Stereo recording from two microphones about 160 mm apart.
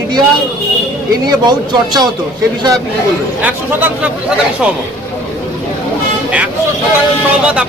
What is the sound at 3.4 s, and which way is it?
Speech, 10° right (ahead or behind).